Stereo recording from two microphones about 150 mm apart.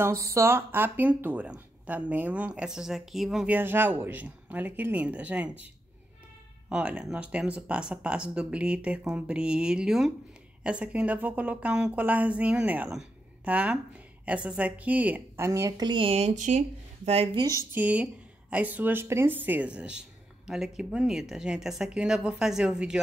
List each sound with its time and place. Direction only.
0.0 s speech: 20° right (ahead or behind)
6.7 s speech: 10° right (ahead or behind); by 17.6 s 25° right (ahead or behind)
17.7 s speech: 10° right (ahead or behind)